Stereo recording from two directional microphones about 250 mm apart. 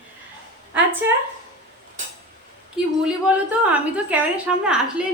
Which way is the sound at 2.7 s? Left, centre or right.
Centre.